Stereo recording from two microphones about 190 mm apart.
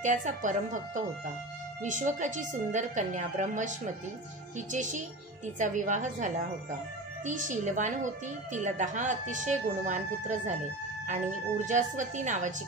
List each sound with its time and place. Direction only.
0.0 s a woman's voice: 40° right (ahead or behind)